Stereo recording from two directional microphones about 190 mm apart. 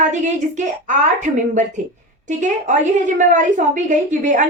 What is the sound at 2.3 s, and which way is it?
A woman's voice, 40° right (ahead or behind).